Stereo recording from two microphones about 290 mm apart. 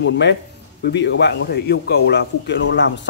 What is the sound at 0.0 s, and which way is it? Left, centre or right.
Speech, left.